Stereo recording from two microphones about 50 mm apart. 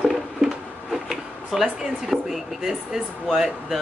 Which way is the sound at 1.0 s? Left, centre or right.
Centre.